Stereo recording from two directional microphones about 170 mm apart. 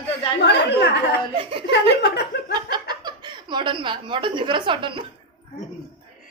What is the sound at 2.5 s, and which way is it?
Chuckle, 25° right (ahead or behind).